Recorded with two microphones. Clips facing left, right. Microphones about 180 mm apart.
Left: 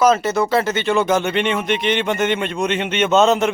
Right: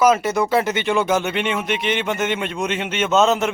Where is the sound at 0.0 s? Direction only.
10° right (ahead or behind).